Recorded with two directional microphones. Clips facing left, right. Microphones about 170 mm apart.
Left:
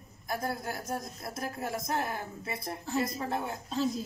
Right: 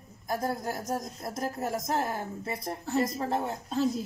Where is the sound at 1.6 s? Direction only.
40° right (ahead or behind).